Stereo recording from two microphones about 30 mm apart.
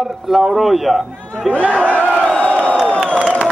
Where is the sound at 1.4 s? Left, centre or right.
Centre.